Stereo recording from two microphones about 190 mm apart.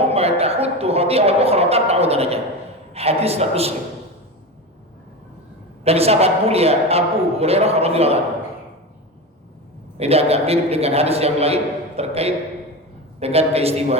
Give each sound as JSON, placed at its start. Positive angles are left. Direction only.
{"t": 0.0, "sound": "a man's voice", "side_deg": -30}
{"t": 5.8, "sound": "a man's voice", "side_deg": -30}
{"t": 10.0, "sound": "a man's voice", "side_deg": -30}